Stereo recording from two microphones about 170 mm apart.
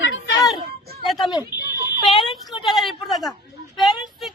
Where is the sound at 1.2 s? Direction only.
25° left (ahead or behind).